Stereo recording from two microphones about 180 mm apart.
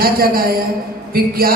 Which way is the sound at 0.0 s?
55° right (ahead or behind).